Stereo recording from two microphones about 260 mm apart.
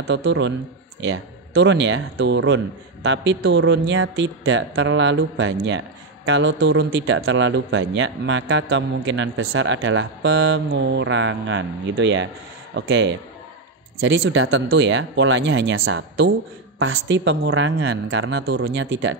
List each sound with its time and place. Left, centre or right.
0.0 s a man's voice: right